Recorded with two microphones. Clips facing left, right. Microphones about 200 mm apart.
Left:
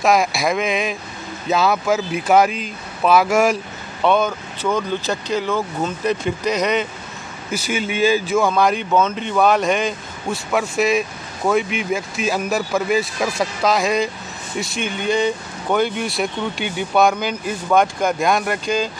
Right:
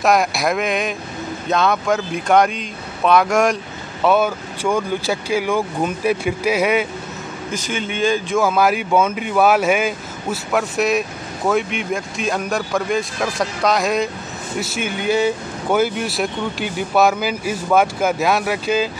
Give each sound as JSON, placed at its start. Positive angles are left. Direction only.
{"t": 0.0, "sound": "speech", "side_deg": 0}
{"t": 7.5, "sound": "speech", "side_deg": 10}